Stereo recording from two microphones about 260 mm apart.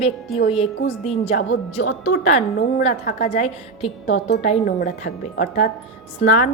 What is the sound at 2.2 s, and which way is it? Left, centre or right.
A woman's voice, left.